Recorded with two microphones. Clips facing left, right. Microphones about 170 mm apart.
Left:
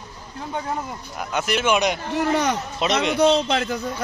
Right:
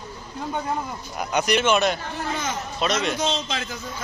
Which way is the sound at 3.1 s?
60° left (ahead or behind).